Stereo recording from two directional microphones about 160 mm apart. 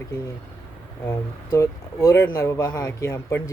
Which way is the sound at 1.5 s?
20° left (ahead or behind).